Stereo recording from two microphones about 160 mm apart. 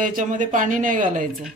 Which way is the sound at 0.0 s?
55° right (ahead or behind).